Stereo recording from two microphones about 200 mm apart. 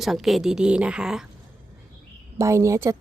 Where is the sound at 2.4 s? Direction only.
15° right (ahead or behind).